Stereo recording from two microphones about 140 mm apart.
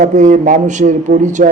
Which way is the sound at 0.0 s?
60° right (ahead or behind).